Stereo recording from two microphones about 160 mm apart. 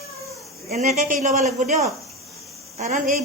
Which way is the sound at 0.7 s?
50° right (ahead or behind).